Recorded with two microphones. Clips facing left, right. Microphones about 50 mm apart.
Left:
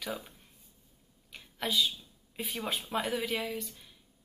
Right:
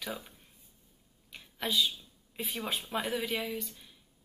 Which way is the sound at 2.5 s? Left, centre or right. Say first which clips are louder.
Left 1 dB; centre.